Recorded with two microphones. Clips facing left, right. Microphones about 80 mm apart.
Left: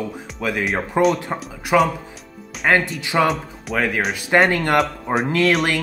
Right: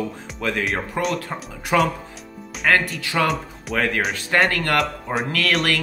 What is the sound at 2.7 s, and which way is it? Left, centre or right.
Speech, centre.